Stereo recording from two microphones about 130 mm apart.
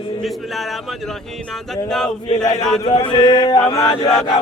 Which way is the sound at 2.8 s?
35° left (ahead or behind).